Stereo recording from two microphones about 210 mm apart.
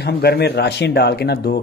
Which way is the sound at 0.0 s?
50° left (ahead or behind).